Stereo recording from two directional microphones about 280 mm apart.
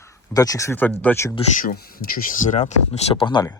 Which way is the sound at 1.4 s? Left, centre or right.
Left.